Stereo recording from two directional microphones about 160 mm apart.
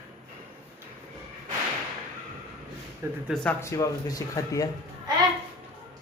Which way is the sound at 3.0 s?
15° right (ahead or behind).